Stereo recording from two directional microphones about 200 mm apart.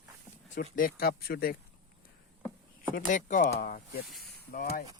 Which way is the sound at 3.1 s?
40° left (ahead or behind).